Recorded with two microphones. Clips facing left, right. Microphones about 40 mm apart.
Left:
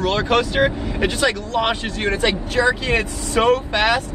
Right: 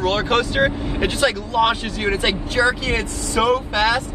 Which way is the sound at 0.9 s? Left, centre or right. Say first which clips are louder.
Even; centre.